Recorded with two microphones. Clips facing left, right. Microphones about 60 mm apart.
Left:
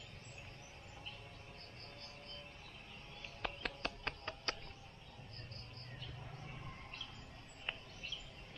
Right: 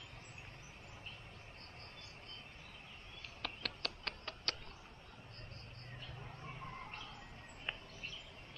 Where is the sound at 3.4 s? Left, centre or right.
Left.